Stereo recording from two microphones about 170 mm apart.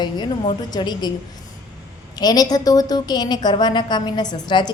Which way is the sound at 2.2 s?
25° left (ahead or behind).